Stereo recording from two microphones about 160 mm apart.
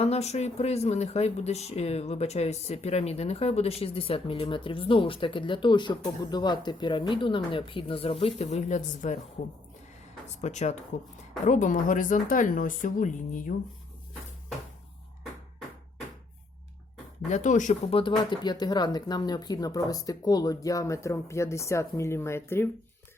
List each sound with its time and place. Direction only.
0.0 s speech: 40° left (ahead or behind)
10.4 s speech: 45° left (ahead or behind)
17.2 s speech: 50° left (ahead or behind)
17.9 s speech: 30° left (ahead or behind); by 22.7 s 15° left (ahead or behind)